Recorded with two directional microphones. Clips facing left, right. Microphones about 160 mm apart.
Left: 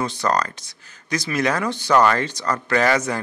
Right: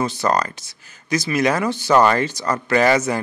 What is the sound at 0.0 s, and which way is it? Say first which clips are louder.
Speech: right 2 dB; 5° right (ahead or behind).